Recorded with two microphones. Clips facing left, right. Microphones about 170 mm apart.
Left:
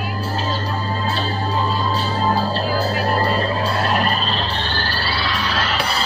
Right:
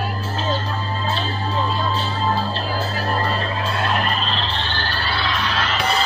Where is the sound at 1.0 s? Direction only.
40° left (ahead or behind).